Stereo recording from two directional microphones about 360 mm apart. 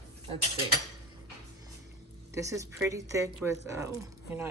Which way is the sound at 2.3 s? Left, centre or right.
Centre.